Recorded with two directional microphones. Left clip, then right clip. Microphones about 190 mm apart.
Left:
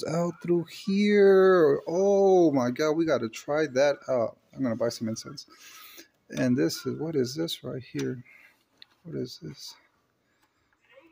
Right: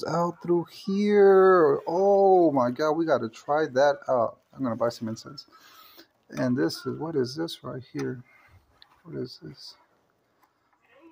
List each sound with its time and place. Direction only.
0.0 s speech: 30° left (ahead or behind)